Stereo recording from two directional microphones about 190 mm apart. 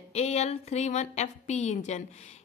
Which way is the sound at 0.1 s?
35° left (ahead or behind).